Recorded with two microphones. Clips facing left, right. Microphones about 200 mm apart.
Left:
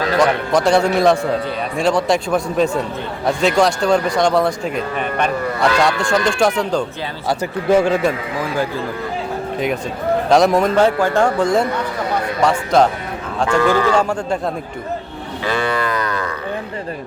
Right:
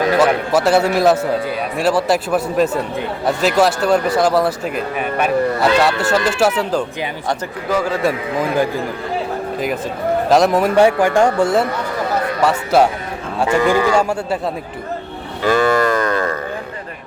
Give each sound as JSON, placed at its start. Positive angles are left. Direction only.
{"t": 0.2, "sound": "speech", "side_deg": -5}
{"t": 7.7, "sound": "a man's voice", "side_deg": 25}
{"t": 10.2, "sound": "speech", "side_deg": 0}
{"t": 10.8, "sound": "speech", "side_deg": -15}
{"t": 15.4, "sound": "livestock", "side_deg": -45}